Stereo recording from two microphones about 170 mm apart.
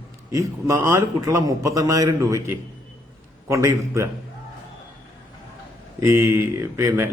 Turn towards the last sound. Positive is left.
turn(degrees=-15)  # may be behind; listen again after turning